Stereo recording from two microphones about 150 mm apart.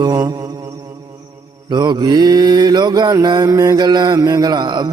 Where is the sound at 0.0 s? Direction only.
25° right (ahead or behind).